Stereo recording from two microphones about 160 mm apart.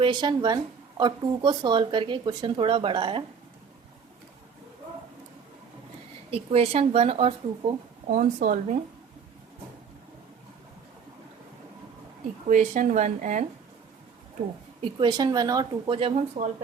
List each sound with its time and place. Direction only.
0.0 s speech: 30° right (ahead or behind)
6.3 s speech: 40° right (ahead or behind)
8.1 s speech: 50° right (ahead or behind)
12.5 s speech: 50° right (ahead or behind)
14.8 s speech: 30° right (ahead or behind)
16.0 s speech: 35° right (ahead or behind)